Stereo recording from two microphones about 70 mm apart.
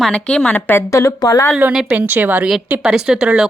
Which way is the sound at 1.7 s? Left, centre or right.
Centre.